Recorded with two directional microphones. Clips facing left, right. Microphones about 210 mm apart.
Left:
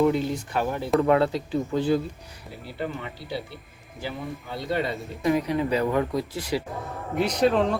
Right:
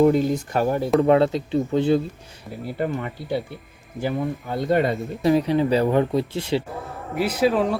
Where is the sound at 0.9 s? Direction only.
25° right (ahead or behind).